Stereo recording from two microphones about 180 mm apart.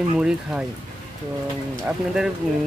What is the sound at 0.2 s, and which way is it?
Speech, 5° right (ahead or behind).